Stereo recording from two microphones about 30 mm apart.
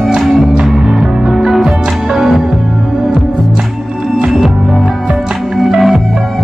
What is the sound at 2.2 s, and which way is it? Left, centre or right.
Music, centre.